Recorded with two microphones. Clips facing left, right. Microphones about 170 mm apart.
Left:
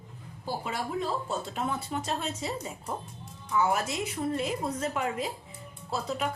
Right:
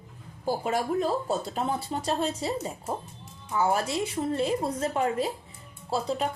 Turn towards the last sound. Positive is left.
turn(degrees=-30)  # may be behind; listen again after turning